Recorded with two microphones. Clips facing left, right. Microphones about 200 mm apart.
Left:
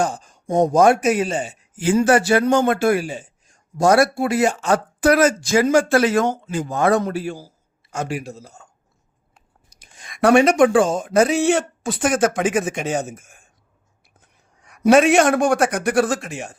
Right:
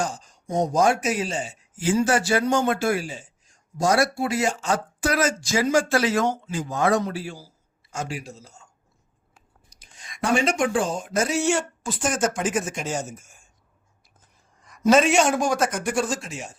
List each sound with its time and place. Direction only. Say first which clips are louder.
0.0 s speech: left 6 dB; 55° left (ahead or behind)
9.6 s a man's voice: left 3 dB; 60° left (ahead or behind)